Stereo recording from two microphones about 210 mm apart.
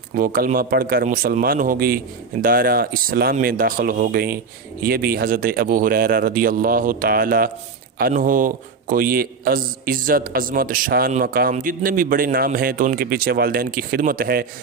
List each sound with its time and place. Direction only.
0.1 s a man's voice: 40° right (ahead or behind)